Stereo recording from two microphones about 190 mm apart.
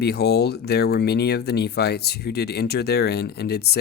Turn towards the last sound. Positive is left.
turn(degrees=60)  # may be behind; listen again after turning